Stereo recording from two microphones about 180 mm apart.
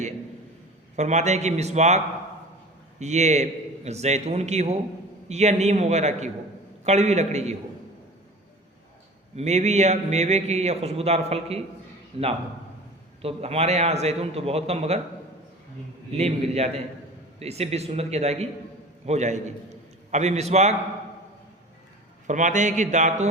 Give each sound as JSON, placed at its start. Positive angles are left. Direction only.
{"t": 0.9, "sound": "a man's voice", "side_deg": -40}
{"t": 3.0, "sound": "a man's voice", "side_deg": -40}
{"t": 9.3, "sound": "a man's voice", "side_deg": -40}
{"t": 16.1, "sound": "a man's voice", "side_deg": -35}
{"t": 22.3, "sound": "speech", "side_deg": -45}